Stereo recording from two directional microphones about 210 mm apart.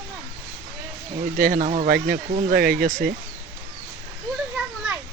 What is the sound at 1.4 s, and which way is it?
Speech, 40° right (ahead or behind).